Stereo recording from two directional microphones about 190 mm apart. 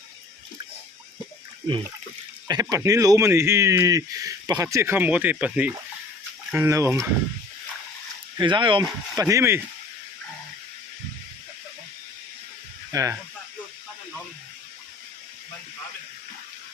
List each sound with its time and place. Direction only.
2.5 s speech: 20° right (ahead or behind)
8.4 s speech: 25° right (ahead or behind)
9.2 s speech: 15° right (ahead or behind)
12.9 s speech: 15° right (ahead or behind)